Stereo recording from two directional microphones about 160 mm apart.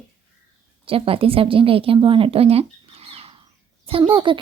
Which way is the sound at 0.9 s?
35° right (ahead or behind).